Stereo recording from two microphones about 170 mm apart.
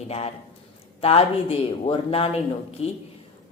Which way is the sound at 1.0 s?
35° left (ahead or behind).